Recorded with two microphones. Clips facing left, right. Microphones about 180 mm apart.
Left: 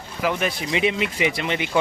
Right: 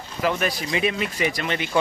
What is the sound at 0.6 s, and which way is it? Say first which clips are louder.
Speech: left 2 dB; 20° left (ahead or behind).